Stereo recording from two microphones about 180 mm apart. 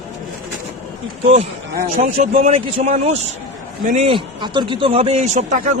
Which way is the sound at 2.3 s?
40° right (ahead or behind).